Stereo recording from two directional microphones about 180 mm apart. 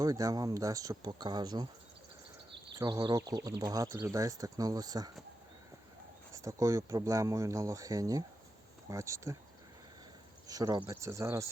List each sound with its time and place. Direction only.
0.0 s speech: 20° right (ahead or behind)
2.7 s speech: 20° right (ahead or behind)
6.3 s speech: 15° right (ahead or behind)
10.4 s speech: 20° right (ahead or behind)